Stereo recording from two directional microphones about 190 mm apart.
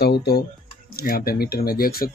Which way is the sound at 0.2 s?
55° left (ahead or behind).